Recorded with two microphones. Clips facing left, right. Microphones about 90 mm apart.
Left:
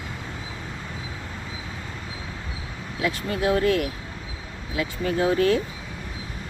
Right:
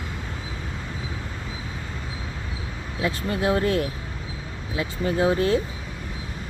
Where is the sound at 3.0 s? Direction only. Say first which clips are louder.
Even; 25° right (ahead or behind).